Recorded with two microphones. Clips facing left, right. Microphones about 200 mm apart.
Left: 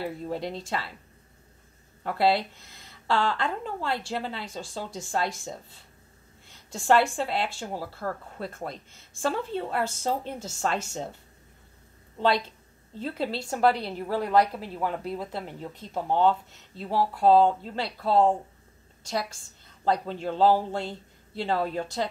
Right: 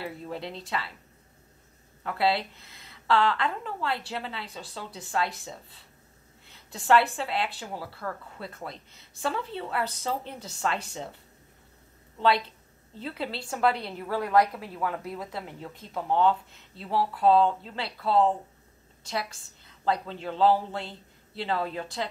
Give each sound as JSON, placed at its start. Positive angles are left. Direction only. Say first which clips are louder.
{"t": 0.0, "sound": "speech", "louder": "left 4 dB", "side_deg": 40}
{"t": 2.0, "sound": "a woman's voice", "louder": "left 3 dB", "side_deg": 40}
{"t": 8.9, "sound": "a woman's voice", "louder": "left 2 dB", "side_deg": 45}
{"t": 12.2, "sound": "a woman's voice", "louder": "even", "side_deg": 40}
{"t": 19.8, "sound": "a woman's voice", "louder": "left 2 dB", "side_deg": 40}